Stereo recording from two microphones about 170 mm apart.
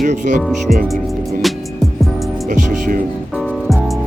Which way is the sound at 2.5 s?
50° right (ahead or behind).